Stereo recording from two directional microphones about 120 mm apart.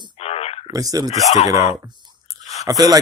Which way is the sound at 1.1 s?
70° left (ahead or behind).